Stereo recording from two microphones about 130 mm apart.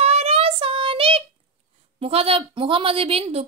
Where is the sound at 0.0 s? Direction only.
50° right (ahead or behind).